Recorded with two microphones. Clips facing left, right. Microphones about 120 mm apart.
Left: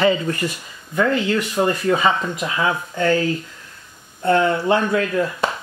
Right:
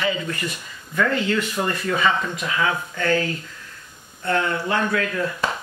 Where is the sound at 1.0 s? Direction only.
20° left (ahead or behind).